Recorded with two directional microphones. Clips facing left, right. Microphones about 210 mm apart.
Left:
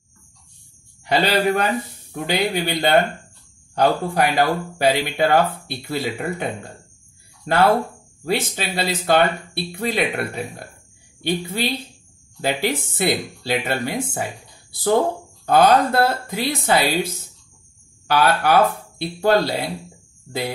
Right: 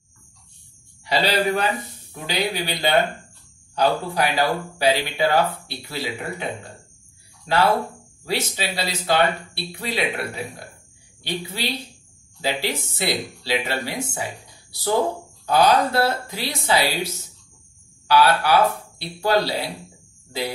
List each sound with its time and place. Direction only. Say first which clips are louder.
1.0 s a man's voice: left 3 dB; 50° left (ahead or behind)